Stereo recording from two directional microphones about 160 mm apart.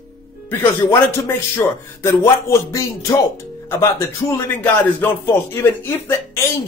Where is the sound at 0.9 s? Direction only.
15° left (ahead or behind).